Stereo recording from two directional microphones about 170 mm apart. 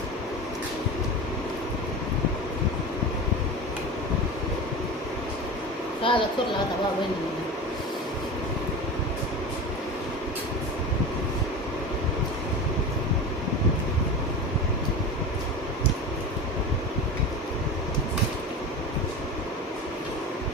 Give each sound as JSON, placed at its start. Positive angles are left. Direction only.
{"t": 6.1, "sound": "a child's voice", "side_deg": 30}